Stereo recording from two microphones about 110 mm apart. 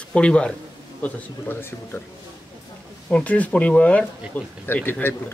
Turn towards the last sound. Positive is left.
turn(degrees=20)  # may be behind; listen again after turning